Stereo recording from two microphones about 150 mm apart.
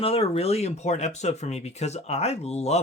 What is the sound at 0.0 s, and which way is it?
Speech, 40° left (ahead or behind).